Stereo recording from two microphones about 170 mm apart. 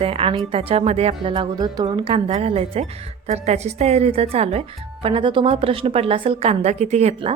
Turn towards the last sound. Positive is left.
turn(degrees=-40)  # may be behind; listen again after turning